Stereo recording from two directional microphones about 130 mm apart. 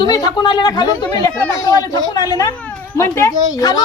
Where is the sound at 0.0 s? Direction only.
30° left (ahead or behind).